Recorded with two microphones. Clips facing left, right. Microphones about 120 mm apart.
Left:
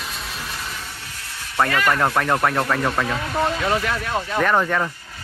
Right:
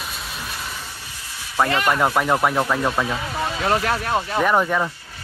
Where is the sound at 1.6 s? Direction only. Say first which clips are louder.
Even; 25° right (ahead or behind).